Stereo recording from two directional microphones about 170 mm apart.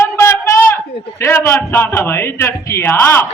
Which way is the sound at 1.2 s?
15° left (ahead or behind).